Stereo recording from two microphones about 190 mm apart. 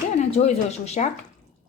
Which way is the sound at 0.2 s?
35° left (ahead or behind).